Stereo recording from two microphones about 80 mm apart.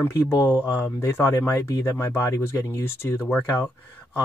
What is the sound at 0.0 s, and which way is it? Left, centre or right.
Speech, left.